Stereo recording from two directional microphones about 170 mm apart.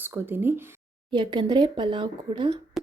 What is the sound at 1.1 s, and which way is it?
Speech, 25° right (ahead or behind).